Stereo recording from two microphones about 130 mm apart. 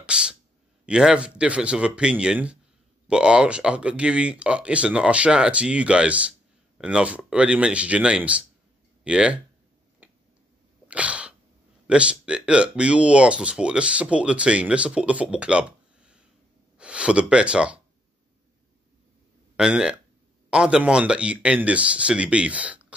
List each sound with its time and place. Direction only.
0.0 s speech: 5° right (ahead or behind)
10.0 s a sound: 15° right (ahead or behind)
10.9 s sneeze: 10° right (ahead or behind)
11.9 s speech: 10° right (ahead or behind)
19.5 s speech: 5° right (ahead or behind)